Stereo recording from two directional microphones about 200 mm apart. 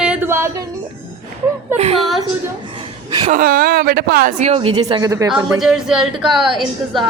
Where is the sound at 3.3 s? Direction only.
45° right (ahead or behind).